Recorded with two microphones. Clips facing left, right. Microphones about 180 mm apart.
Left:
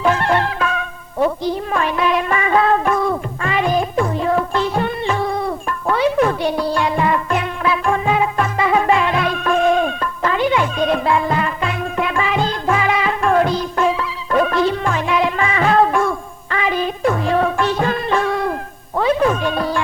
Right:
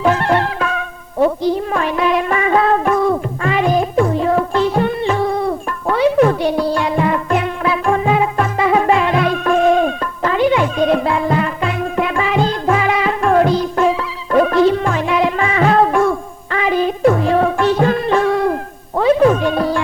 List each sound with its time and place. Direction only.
0.0 s music: 40° right (ahead or behind)
1.7 s music: 45° right (ahead or behind)
10.5 s music: 45° right (ahead or behind)